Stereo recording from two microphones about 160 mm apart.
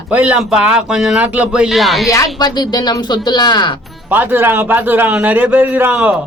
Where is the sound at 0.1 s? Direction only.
10° right (ahead or behind).